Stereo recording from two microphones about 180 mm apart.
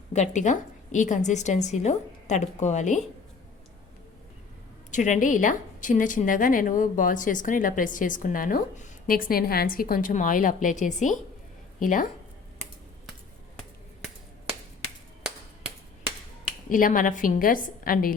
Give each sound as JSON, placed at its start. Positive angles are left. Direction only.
{"t": 0.1, "sound": "a woman's voice", "side_deg": 40}
{"t": 4.9, "sound": "a woman's voice", "side_deg": 45}
{"t": 16.6, "sound": "a woman's voice", "side_deg": 50}